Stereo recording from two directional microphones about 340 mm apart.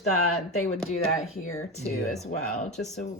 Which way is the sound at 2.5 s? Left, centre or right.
Left.